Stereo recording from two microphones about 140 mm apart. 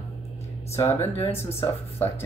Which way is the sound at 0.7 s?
15° left (ahead or behind).